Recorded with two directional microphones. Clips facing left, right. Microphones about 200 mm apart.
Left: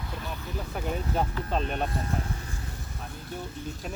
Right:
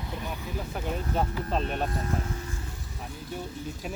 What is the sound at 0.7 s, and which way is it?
Speech, centre (ahead or behind).